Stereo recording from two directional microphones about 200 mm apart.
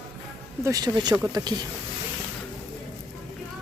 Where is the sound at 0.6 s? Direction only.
20° right (ahead or behind).